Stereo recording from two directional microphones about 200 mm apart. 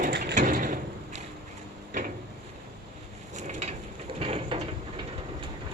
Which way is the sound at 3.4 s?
35° right (ahead or behind).